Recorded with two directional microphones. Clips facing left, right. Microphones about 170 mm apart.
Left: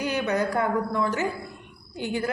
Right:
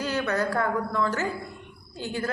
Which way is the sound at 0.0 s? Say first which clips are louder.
Left 1 dB; 15° left (ahead or behind).